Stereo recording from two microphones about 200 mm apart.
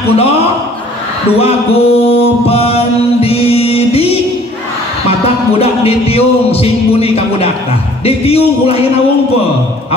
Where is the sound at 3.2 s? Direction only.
30° left (ahead or behind).